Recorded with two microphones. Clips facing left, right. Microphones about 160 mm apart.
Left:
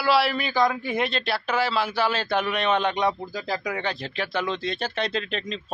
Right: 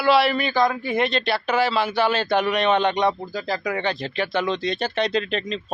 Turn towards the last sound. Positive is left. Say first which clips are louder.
# right 5 dB
turn(degrees=0)  # may be behind; listen again after turning